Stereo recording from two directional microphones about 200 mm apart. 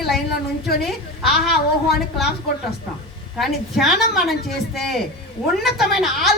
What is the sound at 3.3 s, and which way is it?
Speech, centre (ahead or behind).